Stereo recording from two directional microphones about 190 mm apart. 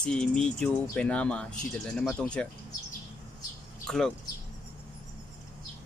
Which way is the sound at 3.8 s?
Centre (ahead or behind).